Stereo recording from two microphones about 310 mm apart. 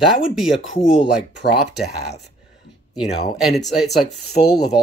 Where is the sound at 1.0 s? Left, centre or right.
Left.